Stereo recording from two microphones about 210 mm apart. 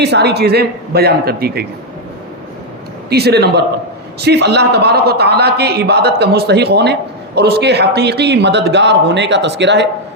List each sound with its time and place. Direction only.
0.0 s a man's voice: 50° right (ahead or behind)
3.1 s a man's voice: 50° right (ahead or behind)